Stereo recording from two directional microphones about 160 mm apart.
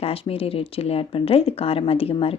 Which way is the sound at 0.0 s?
35° left (ahead or behind).